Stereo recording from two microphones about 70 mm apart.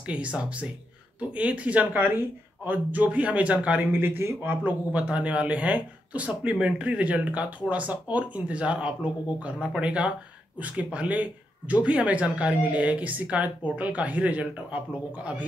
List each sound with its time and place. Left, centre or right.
0.0 s speech: centre
3.9 s speech: right
4.4 s speech: right